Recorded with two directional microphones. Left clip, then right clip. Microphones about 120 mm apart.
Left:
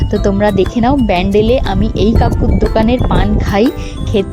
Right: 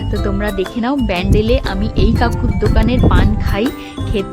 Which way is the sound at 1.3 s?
30° left (ahead or behind).